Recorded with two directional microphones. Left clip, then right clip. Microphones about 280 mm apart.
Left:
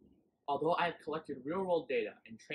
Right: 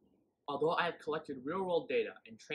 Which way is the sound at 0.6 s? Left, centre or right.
Centre.